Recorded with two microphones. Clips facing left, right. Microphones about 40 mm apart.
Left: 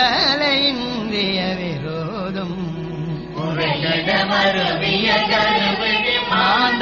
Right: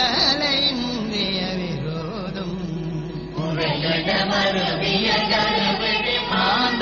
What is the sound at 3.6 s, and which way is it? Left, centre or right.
Chant, left.